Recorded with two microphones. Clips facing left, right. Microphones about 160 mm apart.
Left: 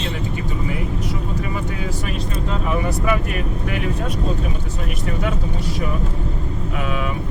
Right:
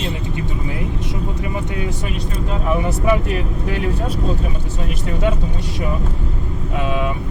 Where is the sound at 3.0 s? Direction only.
30° right (ahead or behind).